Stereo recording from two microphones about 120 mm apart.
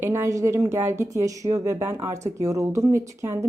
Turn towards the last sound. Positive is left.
turn(degrees=-25)  # may be behind; listen again after turning